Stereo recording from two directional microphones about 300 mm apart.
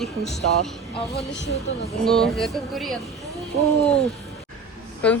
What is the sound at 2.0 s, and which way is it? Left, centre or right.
A woman's voice, centre.